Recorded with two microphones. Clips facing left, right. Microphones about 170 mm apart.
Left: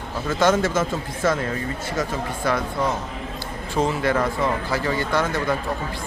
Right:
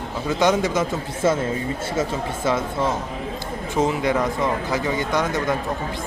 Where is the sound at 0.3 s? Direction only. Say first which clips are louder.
Even; 15° right (ahead or behind).